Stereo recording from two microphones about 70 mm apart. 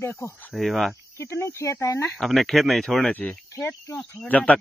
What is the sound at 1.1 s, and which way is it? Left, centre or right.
Speech, left.